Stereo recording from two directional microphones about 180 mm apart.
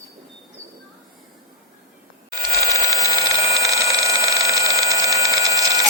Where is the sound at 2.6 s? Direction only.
15° right (ahead or behind).